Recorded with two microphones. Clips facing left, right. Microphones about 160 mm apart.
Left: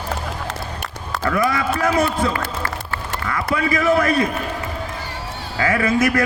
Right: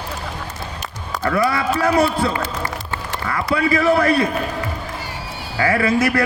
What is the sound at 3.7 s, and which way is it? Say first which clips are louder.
Speech: right 1 dB; 35° right (ahead or behind).